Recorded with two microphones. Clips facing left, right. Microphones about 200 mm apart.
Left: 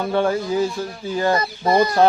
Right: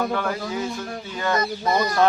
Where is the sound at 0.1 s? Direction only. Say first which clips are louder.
Left 6 dB; 30° left (ahead or behind).